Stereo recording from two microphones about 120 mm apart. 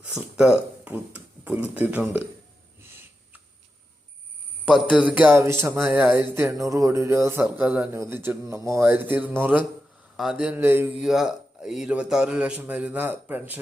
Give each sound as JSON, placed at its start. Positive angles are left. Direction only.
{"t": 0.2, "sound": "speech", "side_deg": -5}
{"t": 4.6, "sound": "a man's voice", "side_deg": -10}
{"t": 5.4, "sound": "a sound", "side_deg": -25}
{"t": 7.4, "sound": "a man's voice", "side_deg": -10}
{"t": 10.9, "sound": "a man's voice", "side_deg": -5}